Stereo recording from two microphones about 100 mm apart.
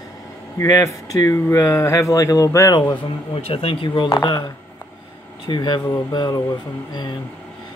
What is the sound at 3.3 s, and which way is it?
Speech, 75° left (ahead or behind).